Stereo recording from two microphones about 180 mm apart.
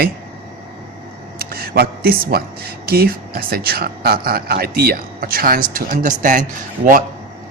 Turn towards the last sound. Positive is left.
turn(degrees=-45)  # may be behind; listen again after turning